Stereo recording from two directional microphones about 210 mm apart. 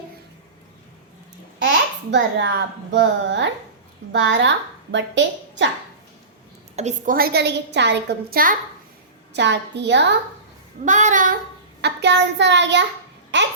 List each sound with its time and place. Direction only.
1.6 s a child's voice: 55° right (ahead or behind)
6.7 s a woman's voice: 35° right (ahead or behind)
9.3 s a woman's voice: 55° right (ahead or behind)
10.8 s child singing: 35° right (ahead or behind)
11.8 s a woman's voice: 55° right (ahead or behind)
13.3 s babbling: 60° right (ahead or behind)